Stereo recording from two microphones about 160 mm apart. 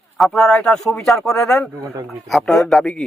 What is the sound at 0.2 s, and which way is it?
Speech, centre (ahead or behind).